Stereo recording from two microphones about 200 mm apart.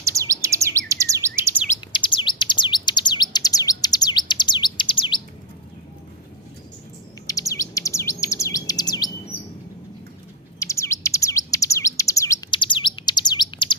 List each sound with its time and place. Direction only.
0.0 s chirp: 15° right (ahead or behind)
1.9 s bird: 25° left (ahead or behind)
7.3 s bird: 15° left (ahead or behind)
10.6 s bird: 15° left (ahead or behind)